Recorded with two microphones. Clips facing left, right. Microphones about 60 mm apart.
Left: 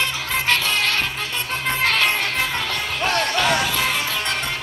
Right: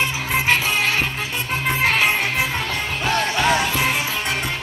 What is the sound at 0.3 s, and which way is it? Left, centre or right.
Music, centre.